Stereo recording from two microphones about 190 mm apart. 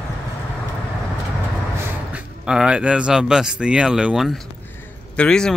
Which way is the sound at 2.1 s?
5° right (ahead or behind).